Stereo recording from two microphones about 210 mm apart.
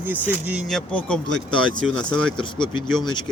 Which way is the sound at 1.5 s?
75° right (ahead or behind).